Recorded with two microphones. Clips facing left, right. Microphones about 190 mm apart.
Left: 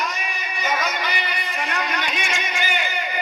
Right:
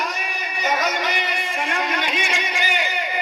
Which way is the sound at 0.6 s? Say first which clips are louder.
Right 2 dB; 40° right (ahead or behind).